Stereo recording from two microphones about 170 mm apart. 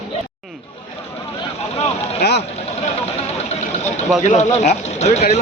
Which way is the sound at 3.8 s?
40° left (ahead or behind).